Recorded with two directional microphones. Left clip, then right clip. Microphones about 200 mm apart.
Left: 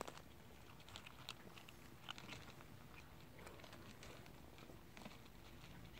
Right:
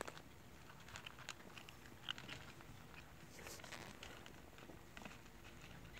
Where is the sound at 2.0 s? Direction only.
15° right (ahead or behind).